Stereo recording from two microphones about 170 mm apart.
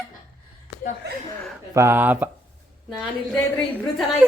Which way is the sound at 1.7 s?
15° right (ahead or behind).